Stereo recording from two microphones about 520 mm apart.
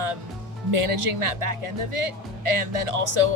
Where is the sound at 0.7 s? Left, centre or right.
Right.